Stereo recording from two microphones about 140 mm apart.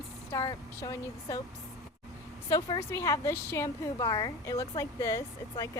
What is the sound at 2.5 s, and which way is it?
A woman's voice, 20° left (ahead or behind).